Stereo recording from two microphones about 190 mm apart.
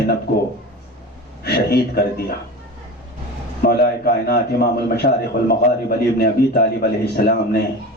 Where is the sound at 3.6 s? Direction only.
55° left (ahead or behind).